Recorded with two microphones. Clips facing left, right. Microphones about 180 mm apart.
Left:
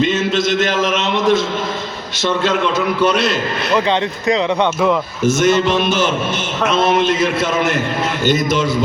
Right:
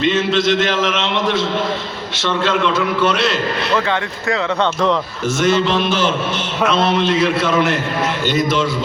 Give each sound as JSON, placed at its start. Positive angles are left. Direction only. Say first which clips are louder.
{"t": 0.0, "sound": "a man's voice", "louder": "even", "side_deg": 45}
{"t": 3.8, "sound": "speech", "louder": "left 3 dB", "side_deg": 20}
{"t": 5.2, "sound": "a man's voice", "louder": "left 3 dB", "side_deg": 45}